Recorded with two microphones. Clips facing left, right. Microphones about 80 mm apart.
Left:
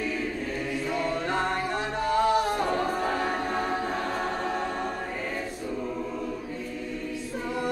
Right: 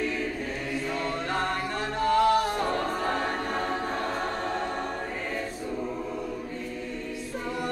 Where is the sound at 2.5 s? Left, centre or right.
Centre.